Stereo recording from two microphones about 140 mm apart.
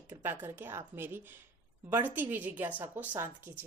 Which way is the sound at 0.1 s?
15° right (ahead or behind).